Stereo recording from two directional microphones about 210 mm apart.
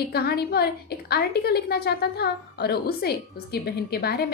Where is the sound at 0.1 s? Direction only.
50° left (ahead or behind).